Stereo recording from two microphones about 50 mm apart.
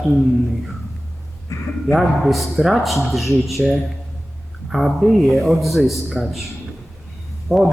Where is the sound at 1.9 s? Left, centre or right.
Centre.